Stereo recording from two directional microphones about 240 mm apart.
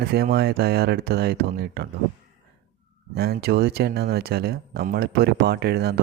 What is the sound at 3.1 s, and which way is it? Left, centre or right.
Speech, right.